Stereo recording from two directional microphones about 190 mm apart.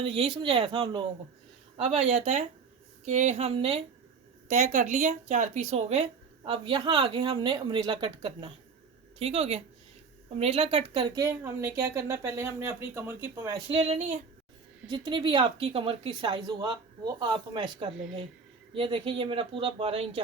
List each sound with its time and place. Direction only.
0.0 s speech: 25° right (ahead or behind)
4.4 s speech: 40° right (ahead or behind); by 13.6 s 15° right (ahead or behind)
13.7 s speech: 35° right (ahead or behind)
14.8 s speech: 25° right (ahead or behind)